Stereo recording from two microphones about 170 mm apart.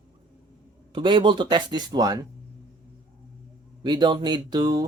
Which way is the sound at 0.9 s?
30° right (ahead or behind).